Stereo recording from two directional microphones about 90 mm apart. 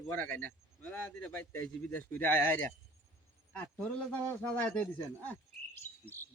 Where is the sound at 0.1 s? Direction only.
20° left (ahead or behind).